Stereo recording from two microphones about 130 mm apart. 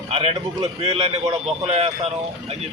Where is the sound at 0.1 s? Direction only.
50° right (ahead or behind).